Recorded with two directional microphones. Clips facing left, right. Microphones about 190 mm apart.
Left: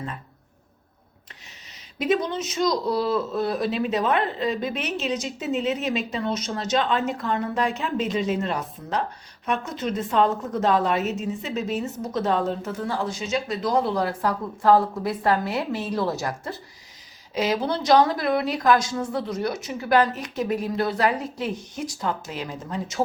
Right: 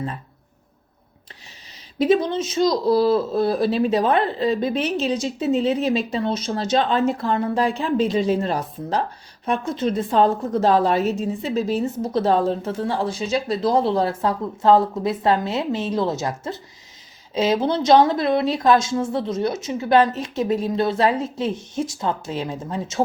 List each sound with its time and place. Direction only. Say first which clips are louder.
2.0 s a woman's voice: right 5 dB; 30° right (ahead or behind)